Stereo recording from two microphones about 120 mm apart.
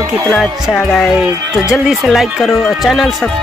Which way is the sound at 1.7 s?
Centre (ahead or behind).